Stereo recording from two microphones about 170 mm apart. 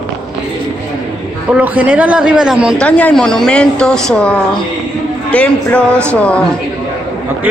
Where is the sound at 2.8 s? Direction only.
10° left (ahead or behind).